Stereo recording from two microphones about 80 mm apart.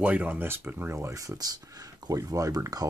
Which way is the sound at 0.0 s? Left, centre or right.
Centre.